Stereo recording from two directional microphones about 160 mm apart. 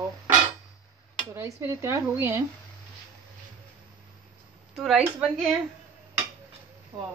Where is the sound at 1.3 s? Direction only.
15° right (ahead or behind).